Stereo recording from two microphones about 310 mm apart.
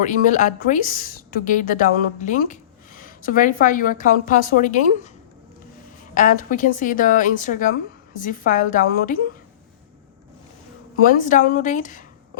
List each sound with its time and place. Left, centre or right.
0.0 s a woman's voice: left
6.1 s a woman's voice: left
11.0 s a woman's voice: left